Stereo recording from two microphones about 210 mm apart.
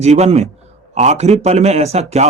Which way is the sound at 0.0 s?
30° right (ahead or behind).